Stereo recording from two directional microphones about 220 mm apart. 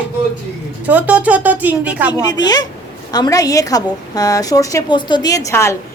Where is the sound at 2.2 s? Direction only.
20° left (ahead or behind).